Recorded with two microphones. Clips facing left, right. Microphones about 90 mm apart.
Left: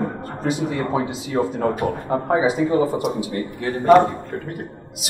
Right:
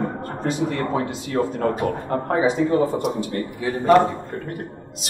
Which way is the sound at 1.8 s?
15° left (ahead or behind).